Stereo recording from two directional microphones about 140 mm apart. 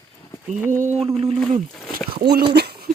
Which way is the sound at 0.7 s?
60° right (ahead or behind).